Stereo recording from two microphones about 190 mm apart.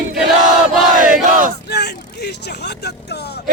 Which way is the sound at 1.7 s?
60° left (ahead or behind).